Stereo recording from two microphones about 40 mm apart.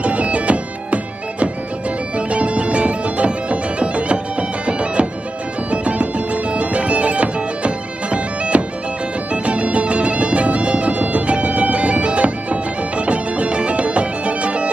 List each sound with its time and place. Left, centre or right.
0.0 s bagpipes: right
9.3 s music: right